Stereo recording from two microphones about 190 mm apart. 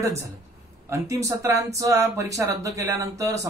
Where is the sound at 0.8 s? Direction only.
15° right (ahead or behind).